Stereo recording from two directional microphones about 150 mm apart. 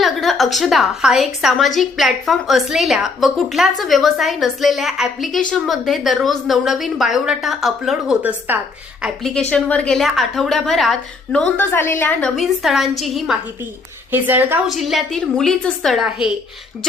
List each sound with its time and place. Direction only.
0.0 s a woman's voice: centre (ahead or behind)
9.5 s a woman's voice: 10° left (ahead or behind)
12.4 s a woman's voice: centre (ahead or behind)
14.1 s a woman's voice: 15° right (ahead or behind)
14.7 s a woman's voice: centre (ahead or behind)